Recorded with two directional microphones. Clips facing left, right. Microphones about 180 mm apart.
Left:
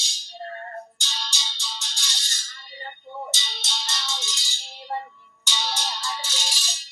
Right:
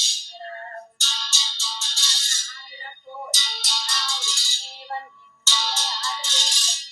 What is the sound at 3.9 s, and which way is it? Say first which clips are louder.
Music: even; 20° left (ahead or behind).